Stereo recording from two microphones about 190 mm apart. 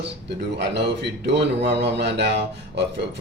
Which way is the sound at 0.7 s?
65° right (ahead or behind).